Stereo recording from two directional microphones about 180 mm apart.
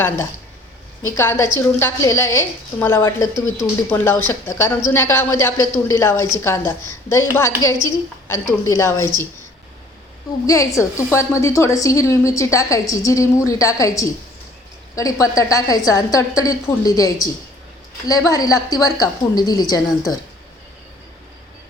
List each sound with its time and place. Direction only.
1.1 s a woman's voice: 15° left (ahead or behind)
10.4 s a woman's voice: 20° left (ahead or behind)